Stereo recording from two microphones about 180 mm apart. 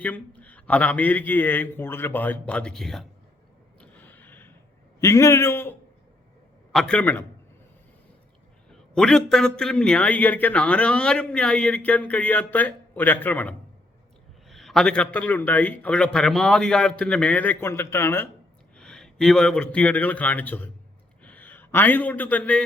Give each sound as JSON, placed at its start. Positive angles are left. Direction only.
{"t": 0.0, "sound": "a man's voice", "side_deg": 10}
{"t": 3.8, "sound": "a sound", "side_deg": 10}
{"t": 4.9, "sound": "a man's voice", "side_deg": 15}
{"t": 6.7, "sound": "a man's voice", "side_deg": 5}
{"t": 8.7, "sound": "a man's voice", "side_deg": 5}
{"t": 18.8, "sound": "a man's voice", "side_deg": 5}